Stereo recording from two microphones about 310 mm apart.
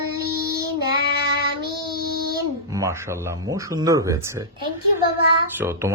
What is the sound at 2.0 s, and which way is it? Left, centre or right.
Child singing, right.